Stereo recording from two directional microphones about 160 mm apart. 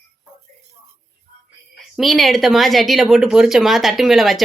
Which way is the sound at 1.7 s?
Centre (ahead or behind).